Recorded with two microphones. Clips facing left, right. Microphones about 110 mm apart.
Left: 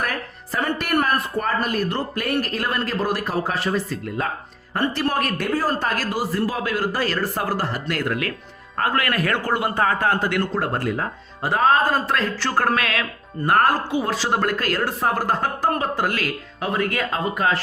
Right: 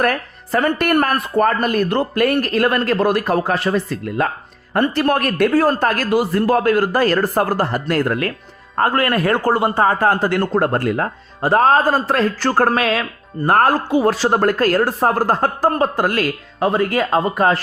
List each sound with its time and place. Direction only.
0.0 s a man's voice: 60° right (ahead or behind); by 10.5 s 35° right (ahead or behind)
10.5 s speech: 55° right (ahead or behind)
11.4 s speech: 40° right (ahead or behind)